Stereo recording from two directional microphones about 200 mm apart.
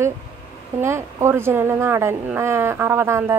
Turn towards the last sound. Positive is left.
turn(degrees=-15)  # may be behind; listen again after turning